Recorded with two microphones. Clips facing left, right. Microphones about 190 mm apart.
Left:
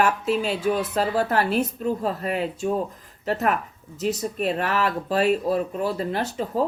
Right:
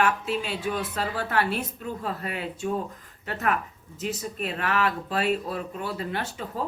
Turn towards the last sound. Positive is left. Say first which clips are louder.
# left 7 dB
turn(degrees=40)  # may be behind; listen again after turning